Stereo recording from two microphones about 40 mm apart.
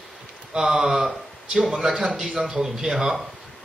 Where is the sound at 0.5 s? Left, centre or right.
Centre.